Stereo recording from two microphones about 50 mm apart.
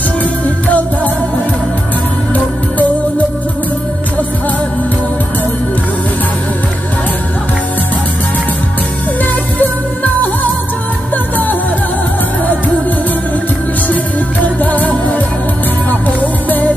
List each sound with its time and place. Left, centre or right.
0.2 s music: left
9.6 s music: left
14.4 s music: left